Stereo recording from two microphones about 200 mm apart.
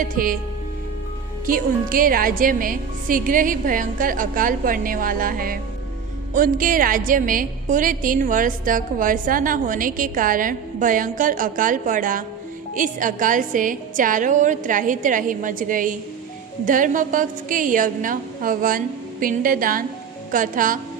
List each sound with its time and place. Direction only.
0.0 s a woman's voice: 45° right (ahead or behind)
1.5 s a woman's voice: 45° right (ahead or behind)